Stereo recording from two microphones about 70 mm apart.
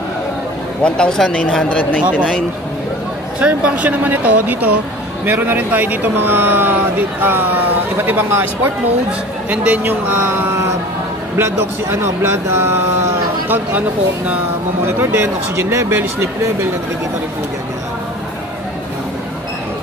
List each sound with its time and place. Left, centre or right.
0.8 s speech: centre
2.0 s speech: centre
3.3 s speech: centre
9.5 s speech: right
14.9 s speech: right